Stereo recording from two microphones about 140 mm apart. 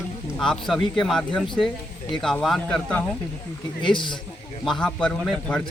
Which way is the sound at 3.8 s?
35° left (ahead or behind).